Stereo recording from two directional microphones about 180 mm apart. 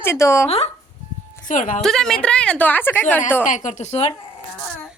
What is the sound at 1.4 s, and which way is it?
Speech, 45° left (ahead or behind).